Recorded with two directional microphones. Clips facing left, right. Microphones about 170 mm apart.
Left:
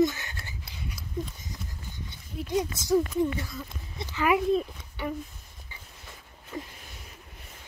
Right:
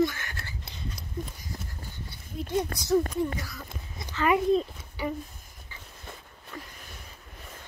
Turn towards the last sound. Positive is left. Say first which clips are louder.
# left 5 dB
turn(degrees=20)  # may be behind; listen again after turning